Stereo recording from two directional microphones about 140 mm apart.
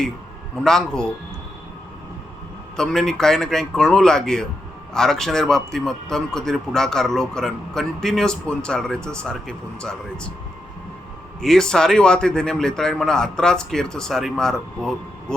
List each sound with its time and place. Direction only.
0.6 s a man's voice: 5° left (ahead or behind)
2.7 s a man's voice: 5° left (ahead or behind)
11.3 s a man's voice: 5° left (ahead or behind)